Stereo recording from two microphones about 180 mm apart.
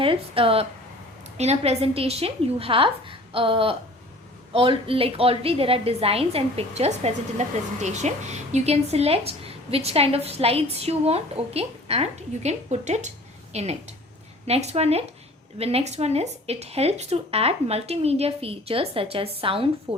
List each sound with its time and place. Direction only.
0.0 s a woman's voice: 30° right (ahead or behind)